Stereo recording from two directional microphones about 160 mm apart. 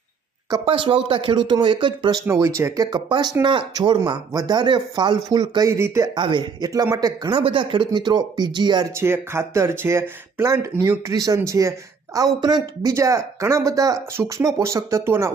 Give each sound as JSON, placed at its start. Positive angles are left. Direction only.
{"t": 0.6, "sound": "speech", "side_deg": -35}
{"t": 2.2, "sound": "speech", "side_deg": -20}
{"t": 6.1, "sound": "speech", "side_deg": -30}